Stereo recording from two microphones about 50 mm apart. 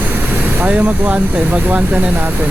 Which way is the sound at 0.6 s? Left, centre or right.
Right.